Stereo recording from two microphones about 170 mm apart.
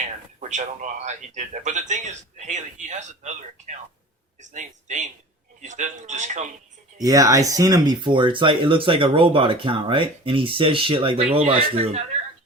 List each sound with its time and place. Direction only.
0.3 s a man's voice: 45° right (ahead or behind)
7.0 s speech: 20° right (ahead or behind); by 12.0 s 35° right (ahead or behind)